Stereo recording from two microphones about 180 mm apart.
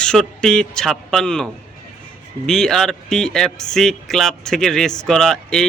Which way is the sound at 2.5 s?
5° left (ahead or behind).